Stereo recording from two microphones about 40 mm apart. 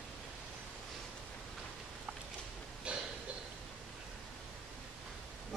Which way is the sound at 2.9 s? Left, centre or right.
Right.